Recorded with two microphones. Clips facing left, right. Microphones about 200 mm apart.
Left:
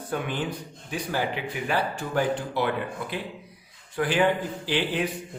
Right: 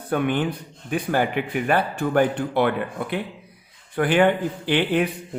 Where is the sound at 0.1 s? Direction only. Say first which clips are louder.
Right 7 dB; 60° right (ahead or behind).